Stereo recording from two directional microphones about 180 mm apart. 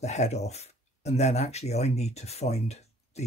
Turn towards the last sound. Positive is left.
turn(degrees=35)  # may be behind; listen again after turning